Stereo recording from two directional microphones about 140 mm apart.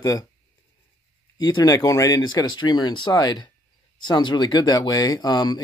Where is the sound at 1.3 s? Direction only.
30° left (ahead or behind).